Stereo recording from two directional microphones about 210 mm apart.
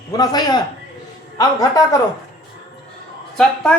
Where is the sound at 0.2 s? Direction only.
20° left (ahead or behind).